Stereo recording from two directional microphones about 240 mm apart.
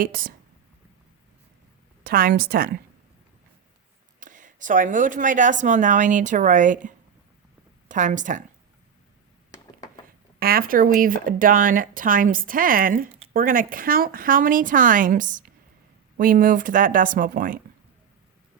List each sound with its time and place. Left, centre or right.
0.0 s speech: right
2.0 s speech: right
4.2 s speech: right
7.9 s speech: right
10.4 s speech: right